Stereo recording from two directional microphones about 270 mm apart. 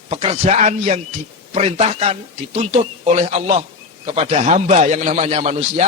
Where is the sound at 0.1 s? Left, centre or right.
Right.